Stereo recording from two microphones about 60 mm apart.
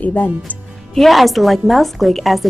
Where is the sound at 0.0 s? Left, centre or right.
Left.